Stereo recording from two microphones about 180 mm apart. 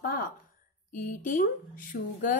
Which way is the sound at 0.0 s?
50° left (ahead or behind).